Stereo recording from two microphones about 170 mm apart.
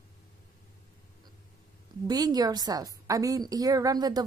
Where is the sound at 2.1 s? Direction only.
25° right (ahead or behind).